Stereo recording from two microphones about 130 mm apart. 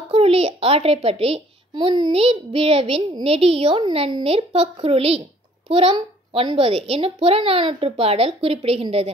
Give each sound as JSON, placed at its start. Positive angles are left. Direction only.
{"t": 0.1, "sound": "a child's voice", "side_deg": -50}
{"t": 2.1, "sound": "speech", "side_deg": -50}